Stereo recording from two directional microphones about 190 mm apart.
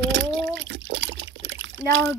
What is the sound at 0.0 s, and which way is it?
Water, 75° right (ahead or behind).